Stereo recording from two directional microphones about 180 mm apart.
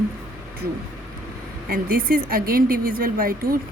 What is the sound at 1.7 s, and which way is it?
A woman's voice, 60° right (ahead or behind).